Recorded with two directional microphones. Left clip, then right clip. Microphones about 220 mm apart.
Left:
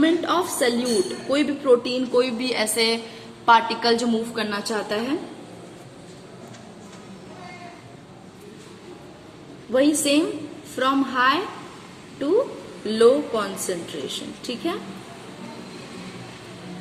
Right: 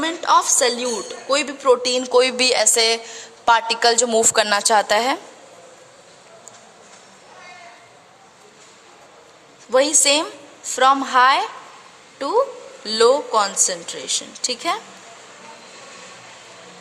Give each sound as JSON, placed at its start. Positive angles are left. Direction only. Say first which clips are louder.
{"t": 0.0, "sound": "a sound", "louder": "right 4 dB", "side_deg": -50}
{"t": 1.3, "sound": "a woman's voice", "louder": "right 3 dB", "side_deg": -50}
{"t": 4.4, "sound": "a woman's voice", "louder": "right 10 dB", "side_deg": -60}
{"t": 9.7, "sound": "a woman's voice", "louder": "right 3 dB", "side_deg": -55}
{"t": 12.8, "sound": "a woman's voice", "louder": "right 1 dB", "side_deg": -55}